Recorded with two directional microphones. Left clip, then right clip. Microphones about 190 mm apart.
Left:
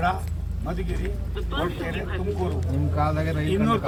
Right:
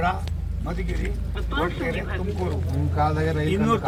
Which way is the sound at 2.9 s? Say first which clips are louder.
Right 3 dB; 40° left (ahead or behind).